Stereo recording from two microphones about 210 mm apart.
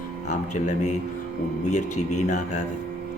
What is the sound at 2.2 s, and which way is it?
Speech, 35° left (ahead or behind).